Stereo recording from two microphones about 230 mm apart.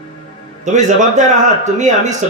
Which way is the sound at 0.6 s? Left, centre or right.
Right.